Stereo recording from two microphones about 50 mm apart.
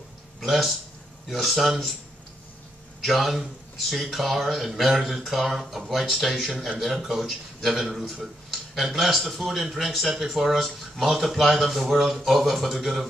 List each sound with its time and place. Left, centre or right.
0.4 s speech: centre
3.0 s a man's voice: centre